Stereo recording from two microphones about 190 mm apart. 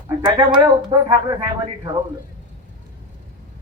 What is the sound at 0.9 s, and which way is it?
A man's voice, 20° right (ahead or behind).